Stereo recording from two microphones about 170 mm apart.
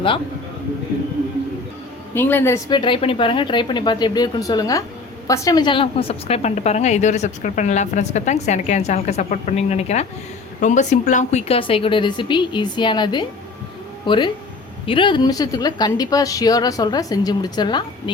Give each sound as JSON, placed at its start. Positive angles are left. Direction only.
{"t": 2.1, "sound": "a woman's voice", "side_deg": 10}
{"t": 2.6, "sound": "a woman's voice", "side_deg": 30}